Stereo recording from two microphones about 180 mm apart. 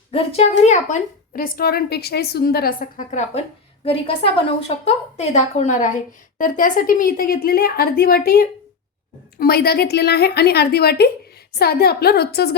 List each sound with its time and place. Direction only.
0.1 s a woman's voice: 30° left (ahead or behind)
1.4 s a woman's voice: 55° left (ahead or behind)
3.8 s a woman's voice: 30° left (ahead or behind); by 12.5 s 65° left (ahead or behind)